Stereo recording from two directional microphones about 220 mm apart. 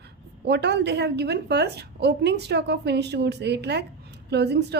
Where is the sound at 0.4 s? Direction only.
50° right (ahead or behind).